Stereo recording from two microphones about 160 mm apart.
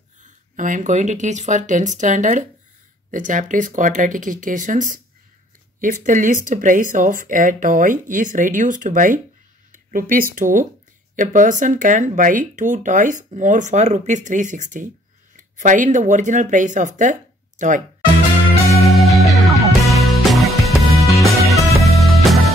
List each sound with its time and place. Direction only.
0.2 s speech: 55° right (ahead or behind)
18.8 s music: centre (ahead or behind)